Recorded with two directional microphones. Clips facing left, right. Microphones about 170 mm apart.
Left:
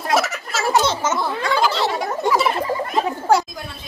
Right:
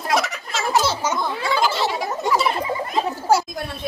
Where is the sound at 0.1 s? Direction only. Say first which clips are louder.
Left 2 dB; 5° left (ahead or behind).